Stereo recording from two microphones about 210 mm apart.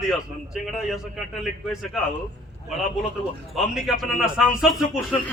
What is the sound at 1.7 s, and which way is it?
Speech, centre (ahead or behind).